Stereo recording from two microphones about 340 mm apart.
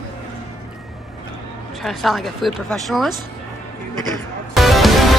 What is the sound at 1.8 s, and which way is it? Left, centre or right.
Speech, centre.